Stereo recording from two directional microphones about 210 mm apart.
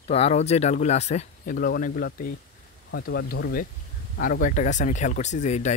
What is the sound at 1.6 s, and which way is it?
Speech, 45° left (ahead or behind).